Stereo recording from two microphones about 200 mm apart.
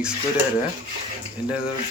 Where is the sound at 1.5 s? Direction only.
5° right (ahead or behind).